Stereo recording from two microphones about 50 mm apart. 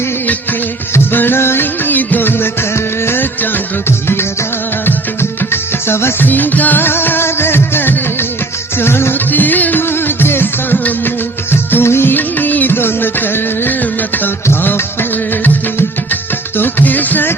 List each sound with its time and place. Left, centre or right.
1.1 s music: left
1.9 s music: left
5.5 s music: left
6.2 s music: left
6.8 s music: left
9.3 s music: left
11.7 s music of bollywood: left
12.1 s music: left
16.6 s music: left